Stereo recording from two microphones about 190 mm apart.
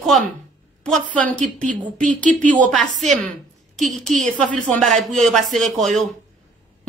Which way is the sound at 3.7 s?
Centre (ahead or behind).